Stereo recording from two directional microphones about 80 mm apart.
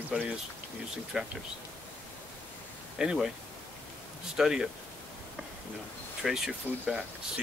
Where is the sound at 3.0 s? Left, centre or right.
Centre.